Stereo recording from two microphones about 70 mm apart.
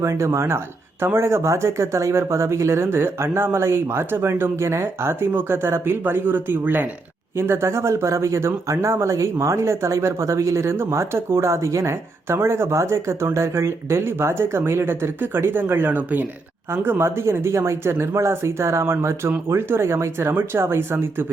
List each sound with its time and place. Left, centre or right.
0.0 s speech: right
7.3 s speech: right